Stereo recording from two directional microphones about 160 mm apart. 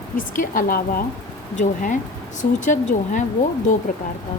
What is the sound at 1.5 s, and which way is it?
Speech, 50° left (ahead or behind).